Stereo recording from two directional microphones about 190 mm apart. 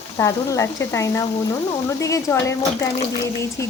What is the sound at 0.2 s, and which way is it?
Speech, 15° left (ahead or behind).